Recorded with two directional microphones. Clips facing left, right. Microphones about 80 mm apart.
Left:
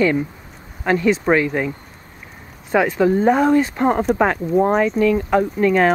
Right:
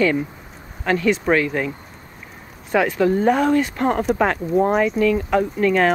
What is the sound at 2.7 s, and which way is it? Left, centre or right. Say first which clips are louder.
Speech: left 2 dB; centre.